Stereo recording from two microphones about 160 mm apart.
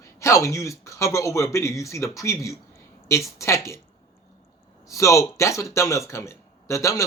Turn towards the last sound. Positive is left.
turn(degrees=20)  # may be behind; listen again after turning